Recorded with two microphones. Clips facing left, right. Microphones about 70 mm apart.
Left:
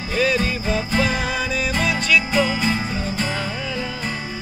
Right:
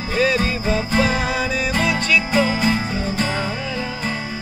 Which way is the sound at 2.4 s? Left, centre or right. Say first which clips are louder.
Right 2 dB; right.